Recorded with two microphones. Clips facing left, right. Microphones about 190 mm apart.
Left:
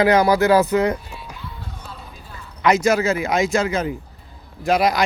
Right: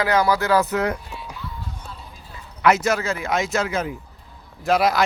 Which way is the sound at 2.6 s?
5° right (ahead or behind).